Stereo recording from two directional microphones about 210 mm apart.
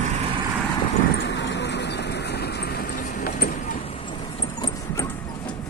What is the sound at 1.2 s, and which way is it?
Vehicle, 55° left (ahead or behind).